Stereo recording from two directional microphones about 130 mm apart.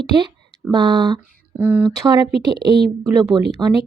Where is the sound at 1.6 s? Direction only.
10° right (ahead or behind).